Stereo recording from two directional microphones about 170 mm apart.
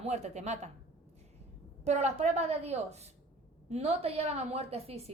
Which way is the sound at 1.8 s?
40° right (ahead or behind).